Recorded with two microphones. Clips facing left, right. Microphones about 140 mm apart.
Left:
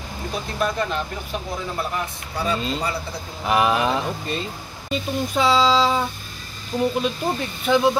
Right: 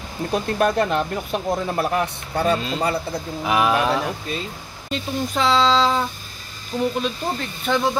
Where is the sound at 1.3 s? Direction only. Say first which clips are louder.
Right 6 dB; 60° right (ahead or behind).